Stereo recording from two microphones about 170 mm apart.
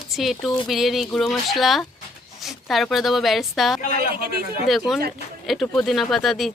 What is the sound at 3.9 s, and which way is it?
Speech, 60° right (ahead or behind).